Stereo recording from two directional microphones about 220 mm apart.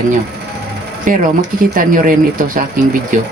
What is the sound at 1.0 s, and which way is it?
Speech, 35° right (ahead or behind).